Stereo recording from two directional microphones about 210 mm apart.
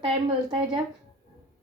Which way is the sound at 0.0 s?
30° right (ahead or behind).